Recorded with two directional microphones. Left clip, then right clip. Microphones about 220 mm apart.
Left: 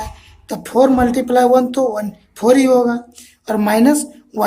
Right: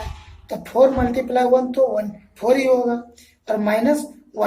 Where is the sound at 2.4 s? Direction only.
40° left (ahead or behind).